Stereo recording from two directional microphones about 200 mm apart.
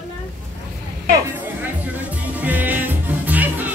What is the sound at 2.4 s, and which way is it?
Music, 10° right (ahead or behind).